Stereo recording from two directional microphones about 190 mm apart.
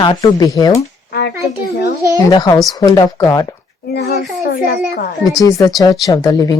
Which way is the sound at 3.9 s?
55° left (ahead or behind).